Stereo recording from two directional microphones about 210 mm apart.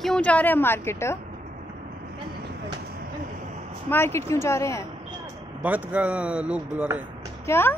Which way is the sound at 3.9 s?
10° left (ahead or behind).